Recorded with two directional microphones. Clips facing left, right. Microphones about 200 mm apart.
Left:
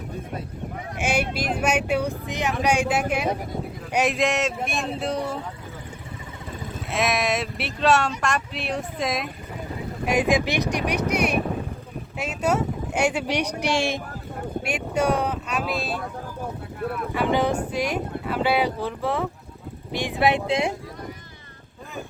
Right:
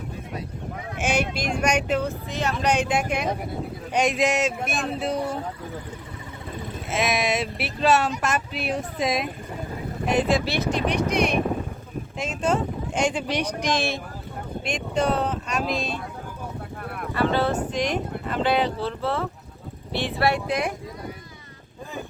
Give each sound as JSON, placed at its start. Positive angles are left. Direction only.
{"t": 1.0, "sound": "speech", "side_deg": 5}
{"t": 6.9, "sound": "speech", "side_deg": 0}
{"t": 10.1, "sound": "speech", "side_deg": 10}
{"t": 12.4, "sound": "speech", "side_deg": 10}
{"t": 17.2, "sound": "speech", "side_deg": 15}